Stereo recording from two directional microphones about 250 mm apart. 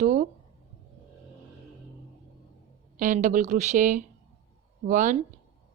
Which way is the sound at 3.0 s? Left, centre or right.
Right.